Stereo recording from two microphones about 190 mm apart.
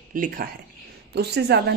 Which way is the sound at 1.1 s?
60° right (ahead or behind).